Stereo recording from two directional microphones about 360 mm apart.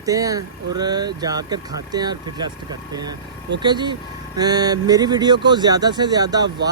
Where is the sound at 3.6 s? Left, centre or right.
Centre.